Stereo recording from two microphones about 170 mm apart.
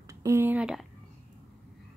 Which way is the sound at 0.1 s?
20° right (ahead or behind).